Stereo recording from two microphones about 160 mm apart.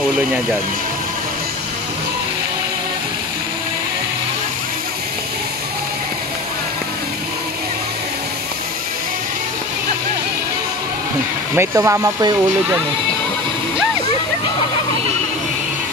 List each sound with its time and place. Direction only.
11.5 s speech: 15° right (ahead or behind)